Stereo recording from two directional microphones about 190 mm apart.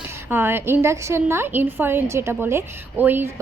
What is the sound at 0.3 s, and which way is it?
A woman's voice, 10° right (ahead or behind).